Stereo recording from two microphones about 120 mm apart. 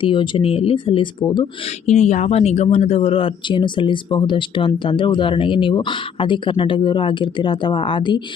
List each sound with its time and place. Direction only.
0.0 s speech: 45° left (ahead or behind)
1.6 s speech: 70° left (ahead or behind); by 8.2 s 45° left (ahead or behind)